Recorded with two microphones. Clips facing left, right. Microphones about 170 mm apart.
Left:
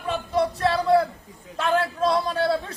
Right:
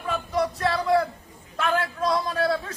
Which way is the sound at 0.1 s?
30° left (ahead or behind).